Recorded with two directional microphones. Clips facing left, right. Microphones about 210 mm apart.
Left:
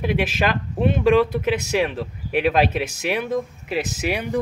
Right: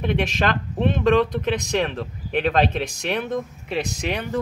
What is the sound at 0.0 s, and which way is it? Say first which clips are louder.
Speech: left 1 dB; 5° left (ahead or behind).